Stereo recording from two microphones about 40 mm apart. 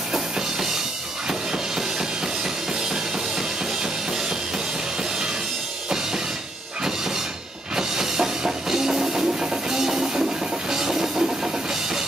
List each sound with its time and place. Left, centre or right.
1.5 s music: centre
7.7 s music: centre
10.7 s train: centre